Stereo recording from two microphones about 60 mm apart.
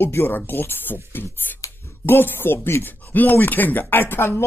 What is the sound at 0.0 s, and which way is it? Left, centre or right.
Speech, left.